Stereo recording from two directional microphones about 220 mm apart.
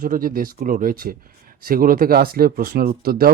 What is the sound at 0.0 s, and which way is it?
Speech, 40° right (ahead or behind).